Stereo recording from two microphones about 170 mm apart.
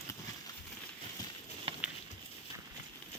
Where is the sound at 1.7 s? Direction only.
35° right (ahead or behind).